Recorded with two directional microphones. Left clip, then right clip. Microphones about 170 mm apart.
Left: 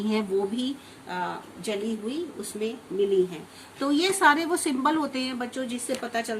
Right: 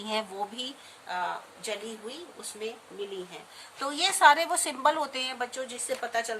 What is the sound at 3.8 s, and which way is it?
A woman's voice, 20° right (ahead or behind).